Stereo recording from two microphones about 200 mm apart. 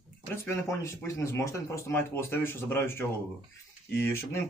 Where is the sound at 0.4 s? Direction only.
15° left (ahead or behind).